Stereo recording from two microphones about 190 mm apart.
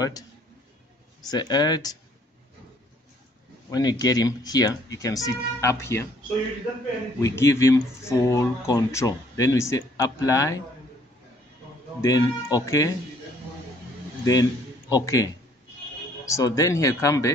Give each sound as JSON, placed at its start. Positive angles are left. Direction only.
{"t": 1.2, "sound": "speech", "side_deg": 20}
{"t": 3.7, "sound": "speech", "side_deg": 20}
{"t": 7.2, "sound": "speech", "side_deg": 15}
{"t": 12.0, "sound": "speech", "side_deg": 20}
{"t": 14.2, "sound": "a man's voice", "side_deg": 20}